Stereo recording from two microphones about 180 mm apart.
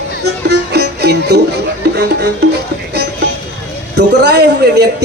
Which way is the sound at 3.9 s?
65° right (ahead or behind).